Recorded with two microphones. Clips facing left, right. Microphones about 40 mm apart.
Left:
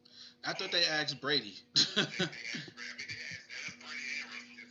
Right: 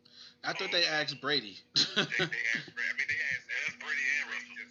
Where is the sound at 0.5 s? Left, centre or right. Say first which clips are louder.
Right 2 dB; centre.